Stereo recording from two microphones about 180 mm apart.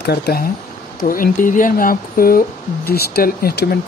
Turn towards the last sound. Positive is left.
turn(degrees=55)  # may be behind; listen again after turning